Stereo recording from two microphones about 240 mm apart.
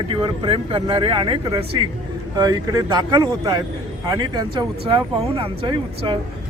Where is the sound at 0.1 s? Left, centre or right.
Right.